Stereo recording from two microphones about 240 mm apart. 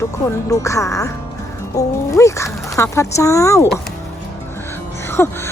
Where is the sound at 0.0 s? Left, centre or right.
Centre.